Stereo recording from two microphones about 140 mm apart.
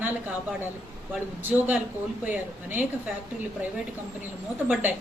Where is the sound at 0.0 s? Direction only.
15° right (ahead or behind).